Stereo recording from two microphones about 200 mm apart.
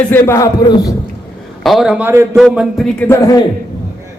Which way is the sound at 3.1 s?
15° left (ahead or behind).